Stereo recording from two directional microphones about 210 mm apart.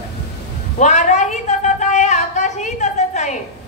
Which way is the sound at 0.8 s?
35° left (ahead or behind).